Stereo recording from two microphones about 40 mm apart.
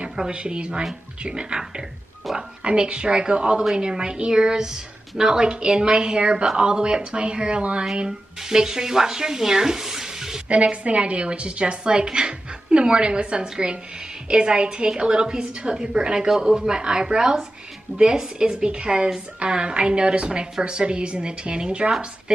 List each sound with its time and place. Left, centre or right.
0.3 s a woman's voice: right
8.0 s speech: centre
10.5 s a woman's voice: right